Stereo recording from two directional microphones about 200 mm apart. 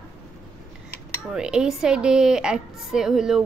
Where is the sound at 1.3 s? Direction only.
5° right (ahead or behind).